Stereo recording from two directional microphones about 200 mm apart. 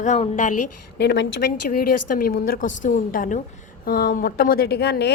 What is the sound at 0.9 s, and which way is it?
Speech, 60° left (ahead or behind).